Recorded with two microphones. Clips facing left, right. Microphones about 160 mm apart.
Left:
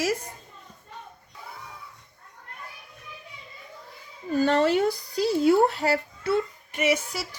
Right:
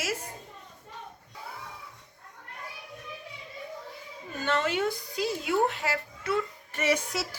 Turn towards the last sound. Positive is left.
turn(degrees=10)  # may be behind; listen again after turning